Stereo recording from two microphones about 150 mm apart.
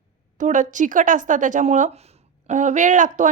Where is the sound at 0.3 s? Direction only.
55° right (ahead or behind).